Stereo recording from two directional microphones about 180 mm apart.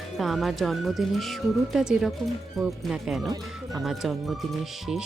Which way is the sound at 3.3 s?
20° right (ahead or behind).